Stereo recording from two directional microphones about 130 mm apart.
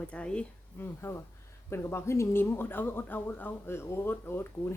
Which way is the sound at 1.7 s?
20° left (ahead or behind).